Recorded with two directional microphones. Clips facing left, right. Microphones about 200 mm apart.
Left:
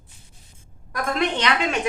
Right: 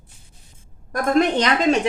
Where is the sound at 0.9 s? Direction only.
45° right (ahead or behind).